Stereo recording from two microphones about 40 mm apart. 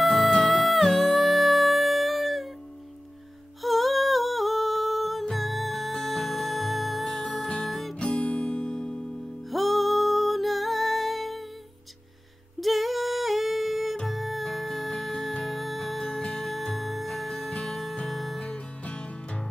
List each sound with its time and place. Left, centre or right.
0.0 s music: centre
3.6 s humming: centre
5.3 s music: centre
8.0 s music: left
9.5 s music: centre
12.5 s humming: centre
14.0 s music: centre
18.9 s music: left